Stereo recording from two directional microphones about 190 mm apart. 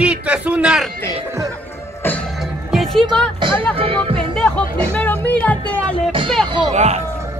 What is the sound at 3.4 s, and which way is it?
Speech, 25° right (ahead or behind).